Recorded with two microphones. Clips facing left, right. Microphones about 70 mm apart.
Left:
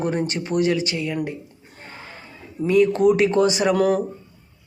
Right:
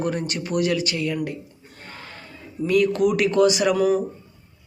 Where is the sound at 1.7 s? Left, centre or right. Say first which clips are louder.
Left 1 dB; left.